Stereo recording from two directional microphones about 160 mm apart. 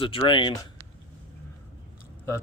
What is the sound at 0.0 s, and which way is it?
Speech, 30° left (ahead or behind).